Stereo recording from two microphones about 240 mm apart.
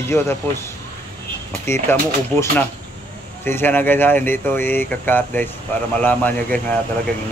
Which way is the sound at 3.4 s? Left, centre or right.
Centre.